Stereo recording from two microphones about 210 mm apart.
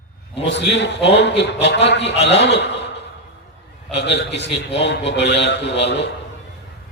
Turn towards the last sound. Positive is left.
turn(degrees=55)  # may be behind; listen again after turning